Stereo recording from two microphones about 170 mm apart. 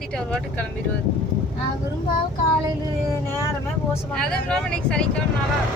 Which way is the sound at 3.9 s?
5° left (ahead or behind).